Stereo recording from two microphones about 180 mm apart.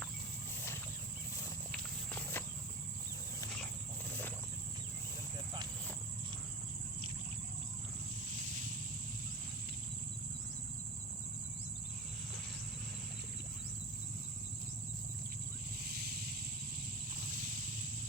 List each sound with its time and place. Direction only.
1.7 s walk: 10° left (ahead or behind)
8.4 s a sound: 45° right (ahead or behind)
15.8 s vehicle: 60° right (ahead or behind)
17.2 s vehicle: 50° right (ahead or behind)